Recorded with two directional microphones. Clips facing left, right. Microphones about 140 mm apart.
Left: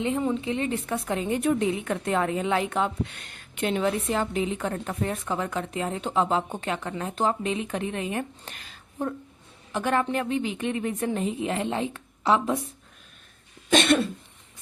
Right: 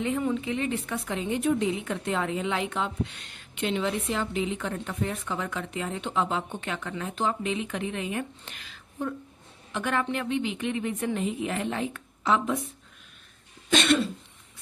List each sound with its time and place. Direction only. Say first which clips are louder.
0.0 s a woman's voice: left 2 dB; 25° left (ahead or behind)
13.7 s cough: left 2 dB; 50° left (ahead or behind)